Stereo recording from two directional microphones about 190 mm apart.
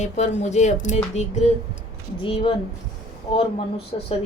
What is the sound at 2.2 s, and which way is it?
Speech, 25° left (ahead or behind).